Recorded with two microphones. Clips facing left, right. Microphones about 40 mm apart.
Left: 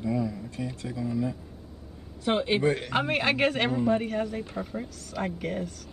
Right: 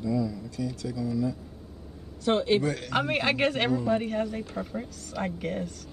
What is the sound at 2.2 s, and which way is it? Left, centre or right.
Speech, centre.